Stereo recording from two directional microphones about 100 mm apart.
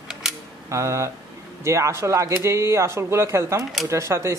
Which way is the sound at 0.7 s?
30° right (ahead or behind).